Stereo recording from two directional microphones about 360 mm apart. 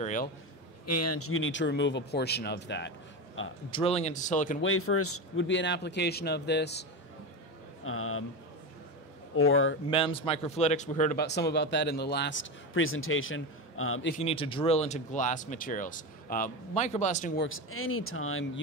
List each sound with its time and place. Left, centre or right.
0.0 s a sound: left
0.8 s speech: left
3.7 s speech: centre
4.6 s speech: left
9.3 s speech: left
9.8 s speech: centre; by 14.1 s left
14.1 s speech: centre
17.5 s speech: left